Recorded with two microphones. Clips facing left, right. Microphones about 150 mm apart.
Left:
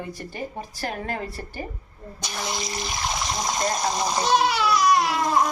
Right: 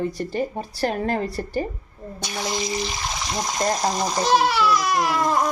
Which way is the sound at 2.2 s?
Centre (ahead or behind).